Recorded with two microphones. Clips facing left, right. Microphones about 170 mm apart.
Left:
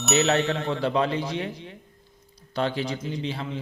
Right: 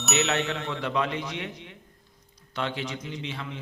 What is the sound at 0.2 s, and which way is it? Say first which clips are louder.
A man's voice: left 4 dB; 35° left (ahead or behind).